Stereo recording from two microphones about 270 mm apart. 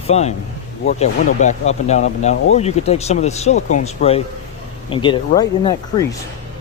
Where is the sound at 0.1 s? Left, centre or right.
Left.